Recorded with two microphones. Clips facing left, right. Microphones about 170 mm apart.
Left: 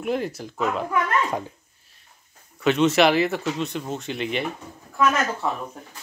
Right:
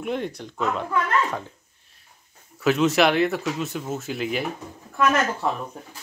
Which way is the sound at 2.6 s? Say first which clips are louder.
Left 1 dB; centre (ahead or behind).